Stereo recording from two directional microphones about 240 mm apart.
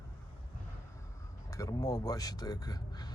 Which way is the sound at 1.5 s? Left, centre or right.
Centre.